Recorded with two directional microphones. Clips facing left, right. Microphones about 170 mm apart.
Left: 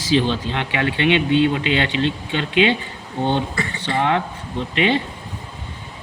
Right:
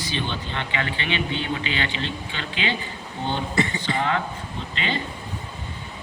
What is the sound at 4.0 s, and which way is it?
Speech, 65° left (ahead or behind).